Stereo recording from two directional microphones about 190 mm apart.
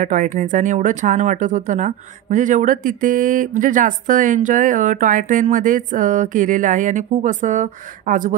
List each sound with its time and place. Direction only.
0.0 s speech: 40° right (ahead or behind)